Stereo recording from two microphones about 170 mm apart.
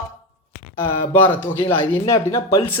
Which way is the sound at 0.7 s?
15° left (ahead or behind).